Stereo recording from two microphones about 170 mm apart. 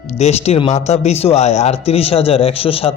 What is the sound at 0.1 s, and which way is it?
Speech, 40° left (ahead or behind).